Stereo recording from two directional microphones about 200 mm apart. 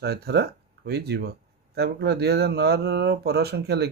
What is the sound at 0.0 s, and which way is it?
Speech, 55° right (ahead or behind).